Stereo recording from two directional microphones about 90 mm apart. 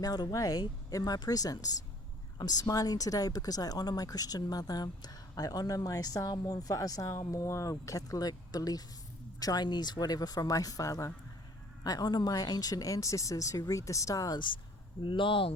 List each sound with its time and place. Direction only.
0.0 s speech: 45° left (ahead or behind)
15.0 s speech: 70° left (ahead or behind)